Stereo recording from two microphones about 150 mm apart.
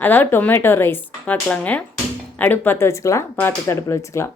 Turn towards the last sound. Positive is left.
turn(degrees=20)  # may be behind; listen again after turning